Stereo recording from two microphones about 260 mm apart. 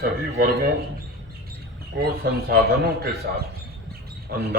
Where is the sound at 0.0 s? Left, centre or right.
Right.